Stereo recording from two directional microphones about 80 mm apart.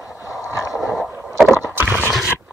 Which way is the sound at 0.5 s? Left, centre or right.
Left.